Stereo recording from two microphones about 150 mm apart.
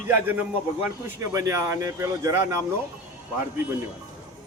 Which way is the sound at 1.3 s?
20° right (ahead or behind).